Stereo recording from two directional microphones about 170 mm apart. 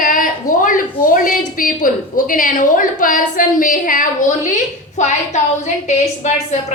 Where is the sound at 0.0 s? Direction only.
50° left (ahead or behind).